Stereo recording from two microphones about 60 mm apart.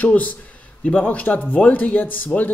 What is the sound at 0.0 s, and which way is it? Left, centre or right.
Speech, left.